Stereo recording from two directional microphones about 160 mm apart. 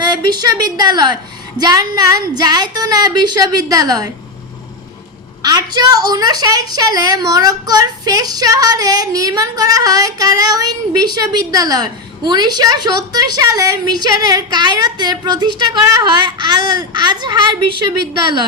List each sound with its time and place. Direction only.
0.0 s a woman's voice: 25° right (ahead or behind)
5.4 s a woman's voice: 25° right (ahead or behind)
17.0 s a woman's voice: 25° right (ahead or behind)